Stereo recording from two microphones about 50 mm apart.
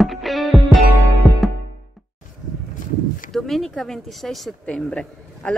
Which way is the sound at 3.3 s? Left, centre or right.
Centre.